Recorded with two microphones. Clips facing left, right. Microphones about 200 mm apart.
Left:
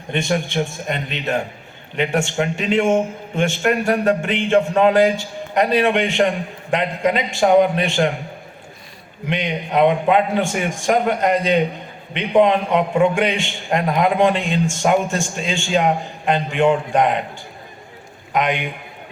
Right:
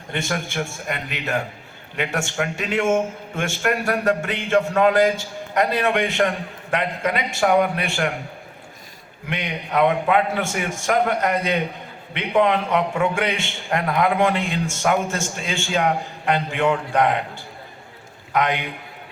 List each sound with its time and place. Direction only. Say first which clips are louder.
0.1 s a man's voice: left 5 dB; 20° left (ahead or behind)
2.0 s a man's voice: left 5 dB; 15° left (ahead or behind)
9.2 s a man's voice: left 5 dB; 20° left (ahead or behind)
18.3 s a man's voice: left 1 dB; 20° left (ahead or behind)